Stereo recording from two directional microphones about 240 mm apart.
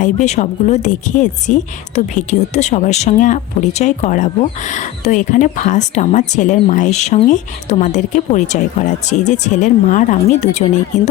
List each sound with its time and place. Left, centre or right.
0.0 s speech: left